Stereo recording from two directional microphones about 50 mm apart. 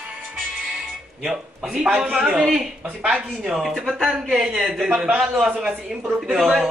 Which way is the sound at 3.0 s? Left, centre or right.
Right.